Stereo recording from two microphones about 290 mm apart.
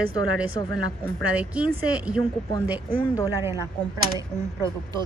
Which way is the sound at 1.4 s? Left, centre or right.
Centre.